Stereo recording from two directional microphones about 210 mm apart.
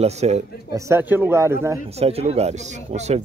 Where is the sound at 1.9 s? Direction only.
30° right (ahead or behind).